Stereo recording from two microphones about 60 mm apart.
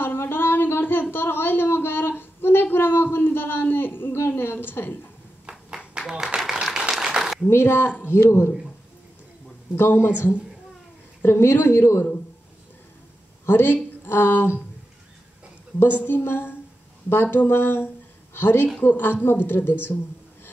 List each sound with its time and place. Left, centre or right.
0.0 s a sound: left
5.9 s a sound: centre
7.4 s speech: left
9.8 s speech: left
13.5 s speech: left
16.1 s speech: left